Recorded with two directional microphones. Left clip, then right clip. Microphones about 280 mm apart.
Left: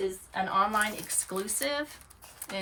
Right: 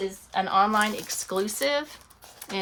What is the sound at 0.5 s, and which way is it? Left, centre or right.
Speech, centre.